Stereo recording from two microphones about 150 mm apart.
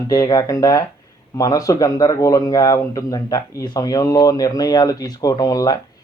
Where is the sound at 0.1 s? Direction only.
25° left (ahead or behind).